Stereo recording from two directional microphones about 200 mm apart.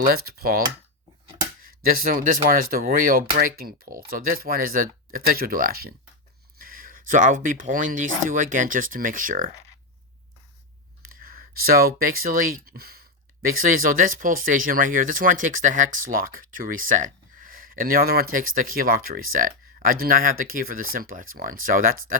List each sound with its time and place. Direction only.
0.3 s speech: 50° right (ahead or behind)
1.6 s speech: 45° right (ahead or behind)
11.0 s speech: 45° right (ahead or behind)